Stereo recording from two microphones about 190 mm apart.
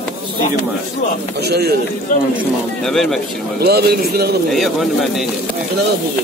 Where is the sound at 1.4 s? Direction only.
60° right (ahead or behind).